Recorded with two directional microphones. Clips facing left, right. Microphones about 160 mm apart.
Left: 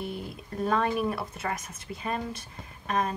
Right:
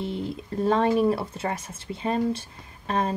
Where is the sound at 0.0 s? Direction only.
25° right (ahead or behind).